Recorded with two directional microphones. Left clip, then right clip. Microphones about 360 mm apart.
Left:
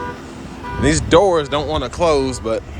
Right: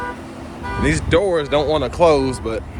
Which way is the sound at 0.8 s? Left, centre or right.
Centre.